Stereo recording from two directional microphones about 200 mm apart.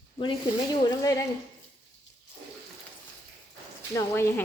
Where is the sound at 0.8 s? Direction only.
15° left (ahead or behind).